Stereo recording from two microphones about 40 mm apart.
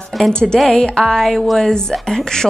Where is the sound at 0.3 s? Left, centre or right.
Left.